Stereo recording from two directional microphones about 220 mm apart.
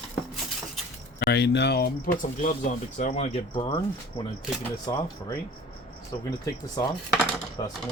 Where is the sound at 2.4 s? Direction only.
35° left (ahead or behind).